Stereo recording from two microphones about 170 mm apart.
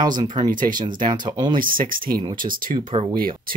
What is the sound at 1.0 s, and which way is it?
Speech, 25° right (ahead or behind).